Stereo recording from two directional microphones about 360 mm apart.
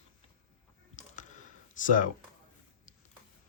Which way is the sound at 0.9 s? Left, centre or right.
Centre.